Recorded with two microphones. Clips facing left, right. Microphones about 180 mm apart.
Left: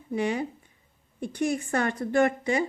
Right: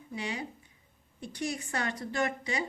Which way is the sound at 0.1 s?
55° left (ahead or behind).